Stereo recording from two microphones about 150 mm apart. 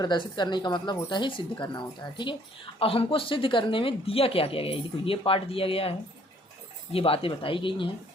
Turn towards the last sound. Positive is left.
turn(degrees=35)  # may be behind; listen again after turning